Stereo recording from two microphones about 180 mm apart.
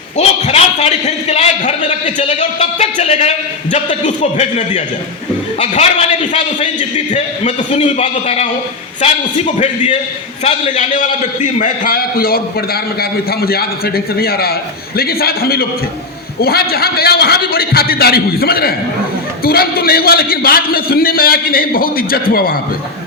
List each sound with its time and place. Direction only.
0.2 s a man's voice: 40° left (ahead or behind)
9.6 s a man's voice: 40° left (ahead or behind); by 22.5 s 55° left (ahead or behind)